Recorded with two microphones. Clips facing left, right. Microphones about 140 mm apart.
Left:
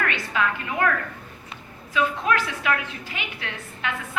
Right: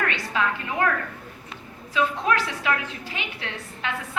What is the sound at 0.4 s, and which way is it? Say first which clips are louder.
Speech: even; 30° right (ahead or behind).